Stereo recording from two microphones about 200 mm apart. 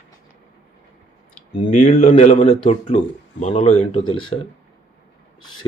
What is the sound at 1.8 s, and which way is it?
Speech, 40° left (ahead or behind).